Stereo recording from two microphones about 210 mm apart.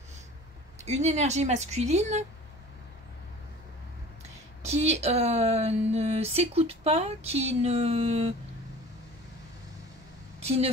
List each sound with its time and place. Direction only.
0.8 s a woman's voice: 35° right (ahead or behind)
4.6 s speech: 30° right (ahead or behind)
10.4 s speech: 30° right (ahead or behind)